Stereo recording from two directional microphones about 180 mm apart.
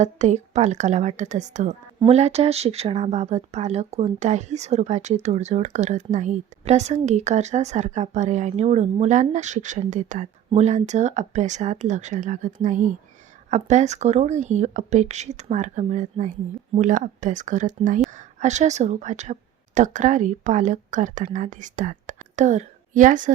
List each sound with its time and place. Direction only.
0.0 s a woman's voice: 40° right (ahead or behind)